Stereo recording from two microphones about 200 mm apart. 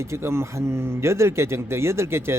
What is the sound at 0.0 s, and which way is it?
Speech, 15° right (ahead or behind).